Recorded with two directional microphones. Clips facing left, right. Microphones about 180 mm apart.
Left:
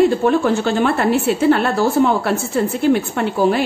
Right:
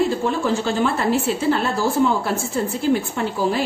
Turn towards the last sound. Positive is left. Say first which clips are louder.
# left 5 dB
turn(degrees=65)  # may be behind; listen again after turning